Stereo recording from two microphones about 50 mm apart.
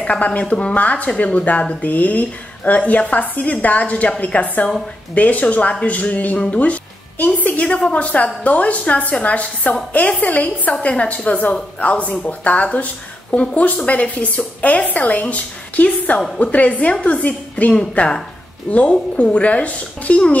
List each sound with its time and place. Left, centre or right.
0.0 s a woman's voice: left